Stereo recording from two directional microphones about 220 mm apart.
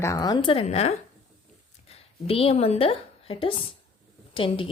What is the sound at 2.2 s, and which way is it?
A woman's voice, 25° left (ahead or behind).